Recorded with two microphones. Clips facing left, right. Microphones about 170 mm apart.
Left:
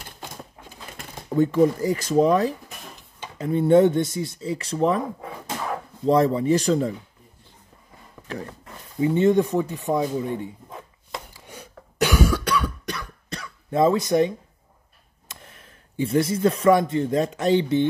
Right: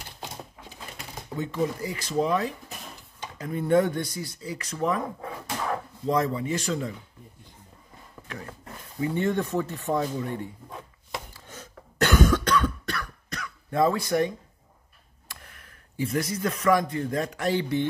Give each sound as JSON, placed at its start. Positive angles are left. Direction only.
{"t": 0.6, "sound": "a sound", "side_deg": 50}
{"t": 3.0, "sound": "speech", "side_deg": 25}
{"t": 6.0, "sound": "speech", "side_deg": 30}
{"t": 9.0, "sound": "speech", "side_deg": 20}
{"t": 11.3, "sound": "cough", "side_deg": 15}
{"t": 13.3, "sound": "throat clearing", "side_deg": 25}
{"t": 15.2, "sound": "speech", "side_deg": 25}